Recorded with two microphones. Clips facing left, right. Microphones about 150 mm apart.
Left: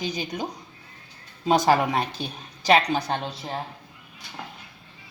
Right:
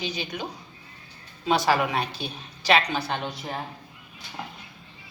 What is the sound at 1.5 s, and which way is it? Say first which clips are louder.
A woman's voice: left 3 dB; 40° left (ahead or behind).